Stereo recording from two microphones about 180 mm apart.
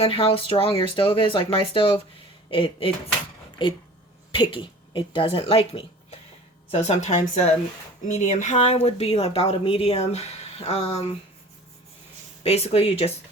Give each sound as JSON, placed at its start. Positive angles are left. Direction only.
{"t": 0.0, "sound": "speech", "side_deg": 30}
{"t": 12.4, "sound": "speech", "side_deg": 35}